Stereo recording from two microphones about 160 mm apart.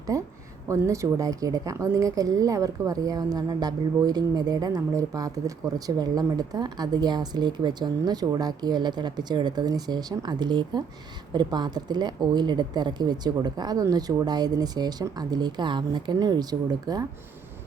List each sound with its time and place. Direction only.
0.1 s speech: 20° right (ahead or behind)